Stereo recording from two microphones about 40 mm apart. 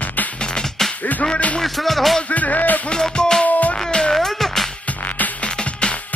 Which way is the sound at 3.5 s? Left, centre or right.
Left.